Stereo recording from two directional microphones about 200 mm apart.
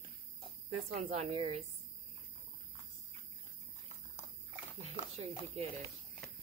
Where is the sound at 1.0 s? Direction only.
30° right (ahead or behind).